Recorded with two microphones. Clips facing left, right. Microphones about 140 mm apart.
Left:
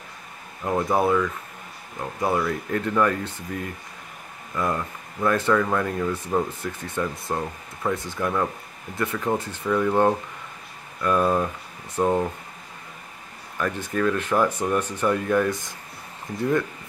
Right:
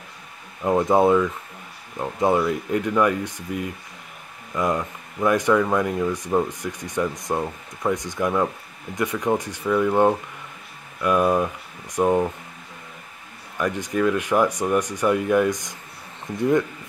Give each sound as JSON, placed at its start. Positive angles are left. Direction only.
{"t": 0.7, "sound": "speech", "side_deg": -20}
{"t": 13.6, "sound": "speech", "side_deg": -15}